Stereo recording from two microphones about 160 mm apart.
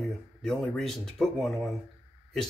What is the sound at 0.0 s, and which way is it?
Speech, centre (ahead or behind).